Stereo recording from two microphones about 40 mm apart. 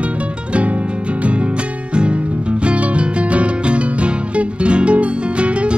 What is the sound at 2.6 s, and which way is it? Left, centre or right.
Music, right.